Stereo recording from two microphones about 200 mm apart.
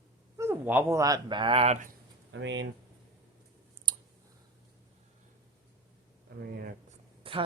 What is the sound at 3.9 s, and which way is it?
Clicking, 25° right (ahead or behind).